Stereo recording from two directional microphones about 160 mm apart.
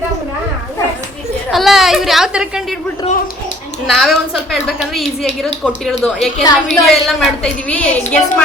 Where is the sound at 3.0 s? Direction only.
55° left (ahead or behind).